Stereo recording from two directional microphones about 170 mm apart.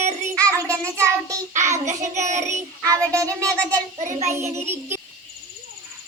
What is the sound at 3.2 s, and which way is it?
Music, 20° right (ahead or behind).